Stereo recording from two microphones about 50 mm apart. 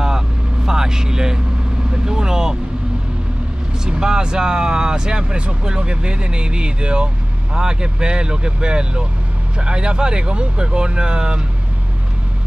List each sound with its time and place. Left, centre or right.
0.7 s vehicle: centre
3.8 s speech: centre